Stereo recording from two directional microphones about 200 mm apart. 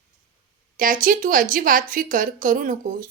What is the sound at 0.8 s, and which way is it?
A woman's voice, 45° right (ahead or behind).